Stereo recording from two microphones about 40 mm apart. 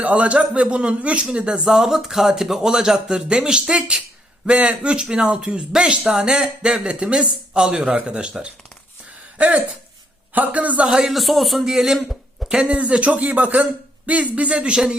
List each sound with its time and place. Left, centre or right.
0.0 s speech: right
1.6 s speech: centre
10.3 s speech: right
10.8 s speech: centre
11.1 s a man's voice: centre
12.6 s speech: right